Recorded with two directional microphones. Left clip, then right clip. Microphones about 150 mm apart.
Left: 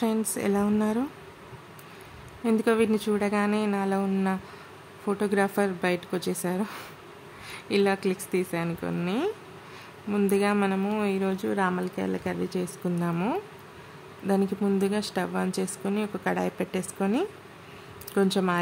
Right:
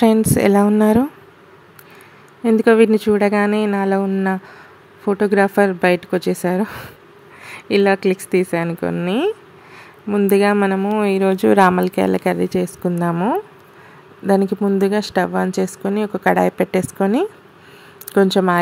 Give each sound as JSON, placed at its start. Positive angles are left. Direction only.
{"t": 0.0, "sound": "speech", "side_deg": -65}
{"t": 2.4, "sound": "speech", "side_deg": -45}
{"t": 4.0, "sound": "speech", "side_deg": -35}
{"t": 11.0, "sound": "speech", "side_deg": -55}
{"t": 14.2, "sound": "speech", "side_deg": -50}